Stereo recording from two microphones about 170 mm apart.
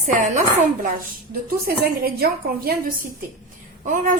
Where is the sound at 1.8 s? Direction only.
65° right (ahead or behind).